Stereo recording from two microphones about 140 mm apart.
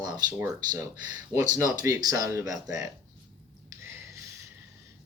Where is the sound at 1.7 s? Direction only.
25° right (ahead or behind).